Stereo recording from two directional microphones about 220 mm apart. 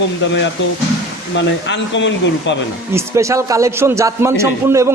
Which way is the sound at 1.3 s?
55° left (ahead or behind).